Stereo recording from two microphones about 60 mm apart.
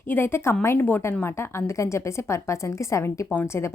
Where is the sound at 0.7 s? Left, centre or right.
Left.